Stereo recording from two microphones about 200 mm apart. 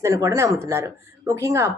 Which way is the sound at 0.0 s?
15° right (ahead or behind).